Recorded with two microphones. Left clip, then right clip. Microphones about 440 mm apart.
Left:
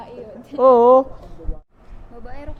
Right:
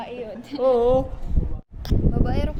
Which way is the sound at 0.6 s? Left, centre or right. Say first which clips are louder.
Left 7 dB; left.